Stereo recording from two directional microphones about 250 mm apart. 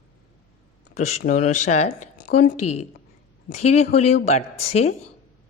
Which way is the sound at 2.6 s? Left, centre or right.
Left.